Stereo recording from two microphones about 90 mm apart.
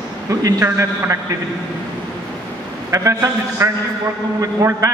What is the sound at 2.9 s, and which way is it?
A man's voice, 35° right (ahead or behind).